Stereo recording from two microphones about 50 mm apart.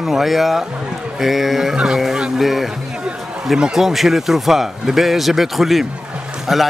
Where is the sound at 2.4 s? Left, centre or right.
Centre.